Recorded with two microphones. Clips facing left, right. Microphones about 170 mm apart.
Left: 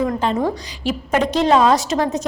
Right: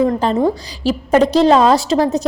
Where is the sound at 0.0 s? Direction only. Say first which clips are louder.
Right 5 dB; 35° right (ahead or behind).